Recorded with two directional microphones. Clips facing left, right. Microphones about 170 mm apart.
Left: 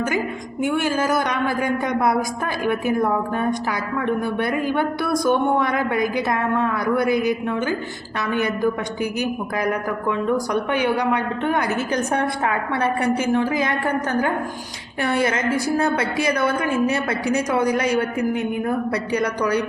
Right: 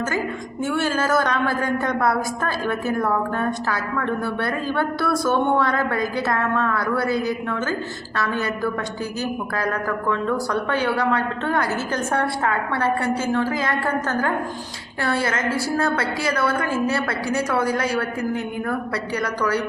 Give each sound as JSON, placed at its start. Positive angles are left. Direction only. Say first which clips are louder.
{"t": 0.6, "sound": "a woman's voice", "louder": "left 2 dB", "side_deg": 15}